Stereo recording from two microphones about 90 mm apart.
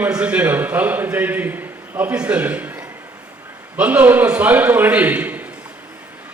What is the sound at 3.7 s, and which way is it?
A man's voice, 20° right (ahead or behind).